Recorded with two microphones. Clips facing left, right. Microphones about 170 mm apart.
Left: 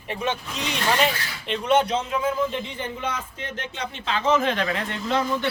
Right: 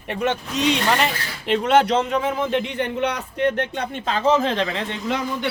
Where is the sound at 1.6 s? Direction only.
90° right; by 5.2 s 20° right (ahead or behind).